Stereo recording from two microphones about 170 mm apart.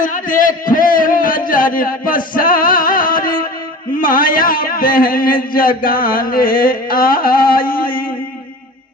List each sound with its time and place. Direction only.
0.0 s a man's voice: 50° left (ahead or behind)